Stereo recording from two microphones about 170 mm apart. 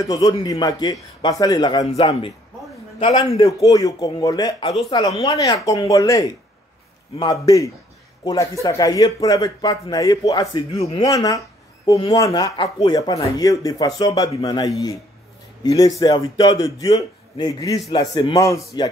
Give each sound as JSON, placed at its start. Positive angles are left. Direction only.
{"t": 0.0, "sound": "a man's voice", "side_deg": 20}
{"t": 3.6, "sound": "a man's voice", "side_deg": 20}
{"t": 10.8, "sound": "a man's voice", "side_deg": 35}
{"t": 11.1, "sound": "a sound", "side_deg": 20}
{"t": 12.0, "sound": "a man's voice", "side_deg": 25}